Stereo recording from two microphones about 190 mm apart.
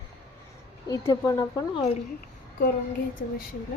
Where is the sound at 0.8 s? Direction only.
20° left (ahead or behind).